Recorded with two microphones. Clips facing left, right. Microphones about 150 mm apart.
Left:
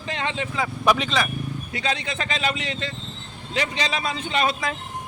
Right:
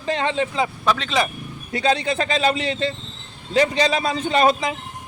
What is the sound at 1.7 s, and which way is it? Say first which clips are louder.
A man's voice: right 9 dB; 35° right (ahead or behind).